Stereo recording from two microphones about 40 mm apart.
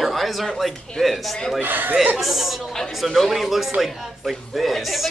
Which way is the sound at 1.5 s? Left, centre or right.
Right.